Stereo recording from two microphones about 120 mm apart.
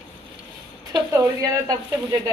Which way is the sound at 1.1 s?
25° right (ahead or behind).